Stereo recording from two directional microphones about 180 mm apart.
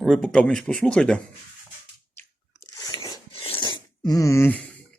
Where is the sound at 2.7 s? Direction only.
20° left (ahead or behind).